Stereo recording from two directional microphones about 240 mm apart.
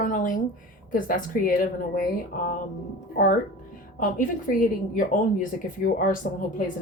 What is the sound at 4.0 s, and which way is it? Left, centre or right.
A woman's voice, left.